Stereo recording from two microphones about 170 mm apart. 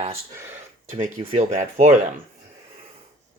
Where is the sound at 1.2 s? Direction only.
40° right (ahead or behind).